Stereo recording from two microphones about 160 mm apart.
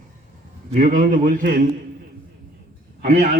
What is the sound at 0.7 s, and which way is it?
Speech, 60° right (ahead or behind).